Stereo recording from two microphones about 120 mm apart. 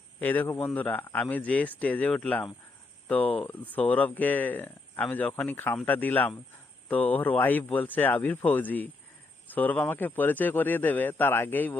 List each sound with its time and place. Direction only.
0.2 s speech: 15° left (ahead or behind)